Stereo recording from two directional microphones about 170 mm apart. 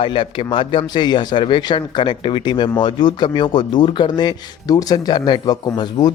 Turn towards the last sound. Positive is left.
turn(degrees=25)  # may be behind; listen again after turning